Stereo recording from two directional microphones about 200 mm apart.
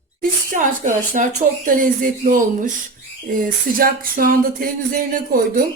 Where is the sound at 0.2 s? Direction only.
40° right (ahead or behind).